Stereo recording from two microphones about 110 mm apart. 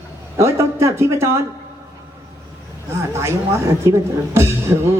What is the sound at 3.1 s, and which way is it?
Speech, 25° right (ahead or behind).